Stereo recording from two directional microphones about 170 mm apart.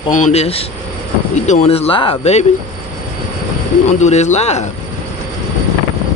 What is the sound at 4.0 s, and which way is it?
Speech, 40° left (ahead or behind).